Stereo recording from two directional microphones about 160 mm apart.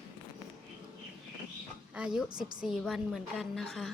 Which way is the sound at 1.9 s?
5° right (ahead or behind).